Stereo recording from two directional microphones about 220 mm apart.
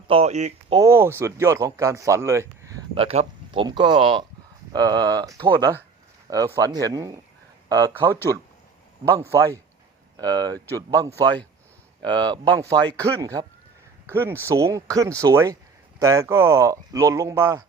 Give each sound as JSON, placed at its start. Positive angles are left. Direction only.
{"t": 0.1, "sound": "speech", "side_deg": -30}
{"t": 0.8, "sound": "speech", "side_deg": -10}
{"t": 2.9, "sound": "speech", "side_deg": -25}
{"t": 10.2, "sound": "speech", "side_deg": -15}